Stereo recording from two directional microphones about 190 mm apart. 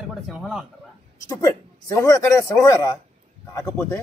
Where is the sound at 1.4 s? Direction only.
15° left (ahead or behind).